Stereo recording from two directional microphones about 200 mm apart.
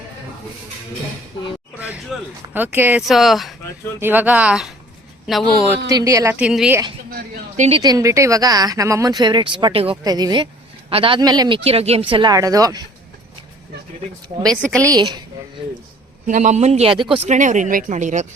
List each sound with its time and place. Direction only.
2.1 s speech: centre (ahead or behind)
2.5 s speech: 10° right (ahead or behind)
5.9 s speech: 15° right (ahead or behind)
6.5 s speech: centre (ahead or behind)
7.1 s speech: 50° right (ahead or behind)
7.8 s speech: 20° right (ahead or behind)
14.5 s speech: 5° left (ahead or behind)
14.8 s speech: 20° right (ahead or behind)
16.2 s speech: 40° right (ahead or behind)